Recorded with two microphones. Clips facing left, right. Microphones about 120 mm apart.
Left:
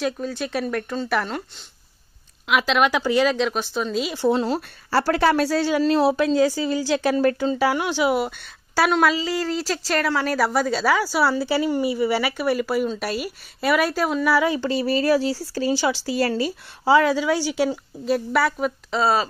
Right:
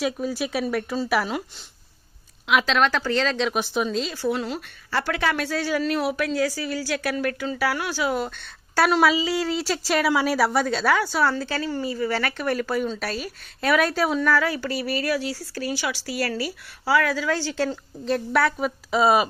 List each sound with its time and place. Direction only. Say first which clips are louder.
0.0 s speech: even; 5° right (ahead or behind)
2.4 s a woman's voice: left 1 dB; 5° left (ahead or behind)
3.5 s speech: right 1 dB; 10° right (ahead or behind)
3.9 s a woman's voice: left 2 dB; 10° left (ahead or behind)
4.2 s a woman's voice: left 5 dB; 30° left (ahead or behind); by 14.3 s centre (ahead or behind)
14.3 s a woman's voice: left 3 dB; 20° left (ahead or behind); by 18.7 s centre (ahead or behind)
18.9 s speech: right 3 dB; 10° right (ahead or behind)